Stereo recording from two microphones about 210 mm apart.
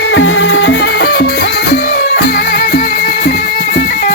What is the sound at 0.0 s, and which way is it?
Music, 60° left (ahead or behind).